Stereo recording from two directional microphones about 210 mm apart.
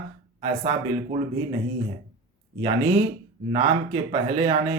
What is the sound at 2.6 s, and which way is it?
Speech, 25° right (ahead or behind).